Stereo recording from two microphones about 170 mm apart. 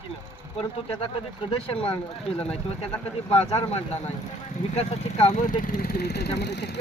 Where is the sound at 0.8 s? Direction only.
30° left (ahead or behind).